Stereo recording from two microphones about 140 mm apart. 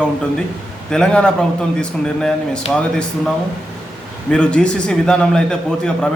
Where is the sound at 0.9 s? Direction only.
5° left (ahead or behind).